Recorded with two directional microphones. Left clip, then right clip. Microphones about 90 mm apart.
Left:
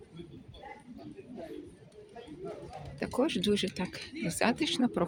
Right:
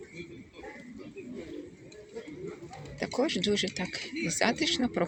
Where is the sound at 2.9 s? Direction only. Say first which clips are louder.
Right 1 dB; 35° left (ahead or behind).